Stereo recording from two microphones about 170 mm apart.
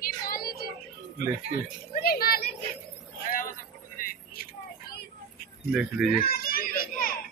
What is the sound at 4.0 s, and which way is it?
Vehicle, 55° left (ahead or behind).